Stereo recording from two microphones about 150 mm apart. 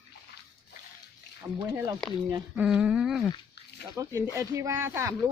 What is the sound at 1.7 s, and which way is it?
Speech, 20° right (ahead or behind).